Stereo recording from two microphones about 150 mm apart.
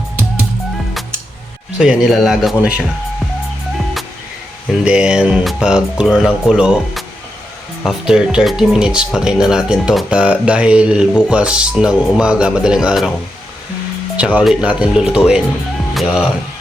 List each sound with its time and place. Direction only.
1.8 s speech: centre (ahead or behind)
4.7 s speech: 5° right (ahead or behind)
14.2 s speech: 10° right (ahead or behind)